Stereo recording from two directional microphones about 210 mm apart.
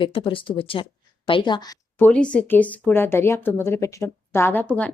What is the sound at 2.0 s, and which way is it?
A woman's voice, 5° left (ahead or behind).